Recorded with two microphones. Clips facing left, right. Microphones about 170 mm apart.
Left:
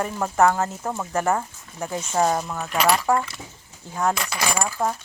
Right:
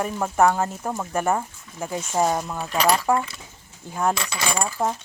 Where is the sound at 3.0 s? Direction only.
15° right (ahead or behind).